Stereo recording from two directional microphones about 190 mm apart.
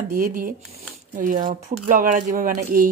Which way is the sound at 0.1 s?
45° right (ahead or behind).